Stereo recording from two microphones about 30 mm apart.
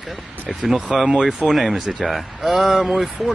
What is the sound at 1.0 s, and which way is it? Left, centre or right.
Speech, centre.